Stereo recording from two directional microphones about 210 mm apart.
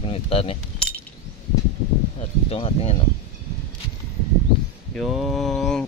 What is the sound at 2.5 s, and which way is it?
Speech, 30° left (ahead or behind).